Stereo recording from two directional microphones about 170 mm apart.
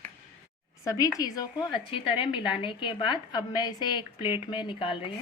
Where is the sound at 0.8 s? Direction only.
20° left (ahead or behind).